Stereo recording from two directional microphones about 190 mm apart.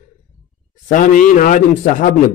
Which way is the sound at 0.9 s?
40° left (ahead or behind).